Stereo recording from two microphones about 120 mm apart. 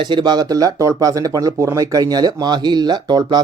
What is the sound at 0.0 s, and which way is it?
Speech, 40° right (ahead or behind).